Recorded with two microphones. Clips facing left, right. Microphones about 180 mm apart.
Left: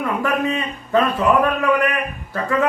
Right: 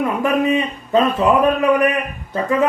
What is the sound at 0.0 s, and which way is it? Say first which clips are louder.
A man's voice: right 3 dB; 20° right (ahead or behind).